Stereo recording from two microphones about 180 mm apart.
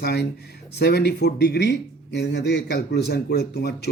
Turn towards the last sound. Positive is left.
turn(degrees=65)  # may be behind; listen again after turning